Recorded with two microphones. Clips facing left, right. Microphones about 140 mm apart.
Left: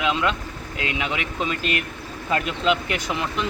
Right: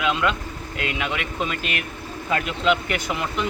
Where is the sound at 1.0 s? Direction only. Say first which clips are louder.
Even; 5° right (ahead or behind).